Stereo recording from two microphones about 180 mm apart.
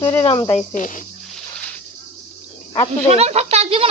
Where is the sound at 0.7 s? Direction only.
45° left (ahead or behind).